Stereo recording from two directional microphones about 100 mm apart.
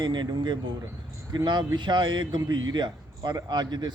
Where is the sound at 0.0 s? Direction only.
50° right (ahead or behind).